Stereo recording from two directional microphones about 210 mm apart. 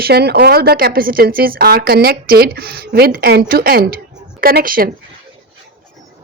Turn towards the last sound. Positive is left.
turn(degrees=-45)  # may be behind; listen again after turning